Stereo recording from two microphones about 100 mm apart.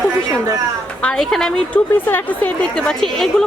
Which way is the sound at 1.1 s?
5° left (ahead or behind).